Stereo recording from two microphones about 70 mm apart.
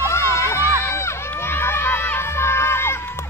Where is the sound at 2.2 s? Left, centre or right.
Left.